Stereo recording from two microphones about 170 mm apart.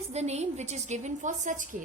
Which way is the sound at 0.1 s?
40° right (ahead or behind).